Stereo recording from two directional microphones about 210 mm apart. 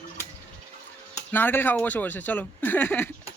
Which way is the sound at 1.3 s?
10° left (ahead or behind).